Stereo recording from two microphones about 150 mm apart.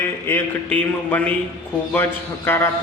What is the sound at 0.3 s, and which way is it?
A man's voice, 10° left (ahead or behind).